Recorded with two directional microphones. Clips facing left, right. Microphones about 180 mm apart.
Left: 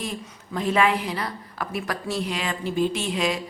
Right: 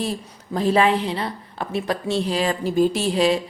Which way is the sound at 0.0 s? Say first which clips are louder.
Right 6 dB; 35° right (ahead or behind).